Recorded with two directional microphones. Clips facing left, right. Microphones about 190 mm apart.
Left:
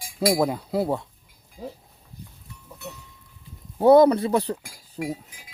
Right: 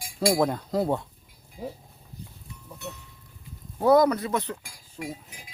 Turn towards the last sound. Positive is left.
turn(degrees=35)  # may be behind; listen again after turning